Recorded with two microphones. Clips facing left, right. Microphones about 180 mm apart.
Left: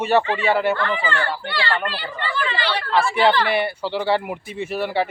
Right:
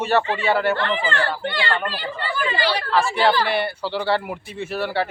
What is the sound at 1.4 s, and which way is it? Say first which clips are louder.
Speech: right 1 dB; 20° right (ahead or behind).